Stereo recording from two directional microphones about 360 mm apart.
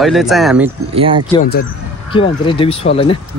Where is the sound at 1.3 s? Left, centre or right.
Left.